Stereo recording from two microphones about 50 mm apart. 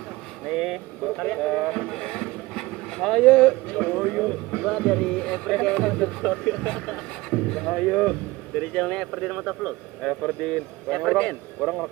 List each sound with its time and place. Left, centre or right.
0.5 s speech: centre
1.0 s speech: centre
5.8 s speech: centre
11.6 s speech: centre